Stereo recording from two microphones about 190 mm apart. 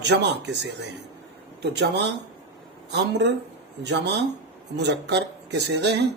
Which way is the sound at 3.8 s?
65° right (ahead or behind).